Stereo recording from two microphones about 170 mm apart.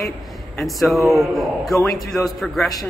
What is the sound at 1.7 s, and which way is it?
Speech, centre (ahead or behind).